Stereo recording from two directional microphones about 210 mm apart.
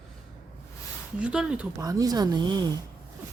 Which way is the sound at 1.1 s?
5° right (ahead or behind).